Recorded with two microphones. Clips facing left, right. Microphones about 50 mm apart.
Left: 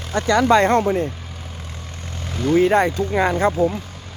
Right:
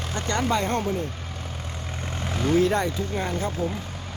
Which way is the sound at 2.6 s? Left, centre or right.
Left.